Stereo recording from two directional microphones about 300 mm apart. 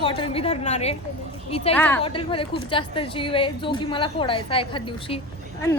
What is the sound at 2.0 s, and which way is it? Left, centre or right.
A woman's voice, centre.